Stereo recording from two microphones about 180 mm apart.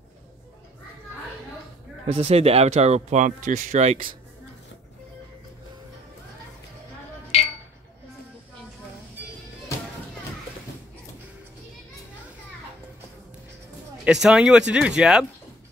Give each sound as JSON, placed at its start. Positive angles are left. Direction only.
{"t": 2.0, "sound": "speech", "side_deg": -35}
{"t": 14.0, "sound": "speech", "side_deg": -5}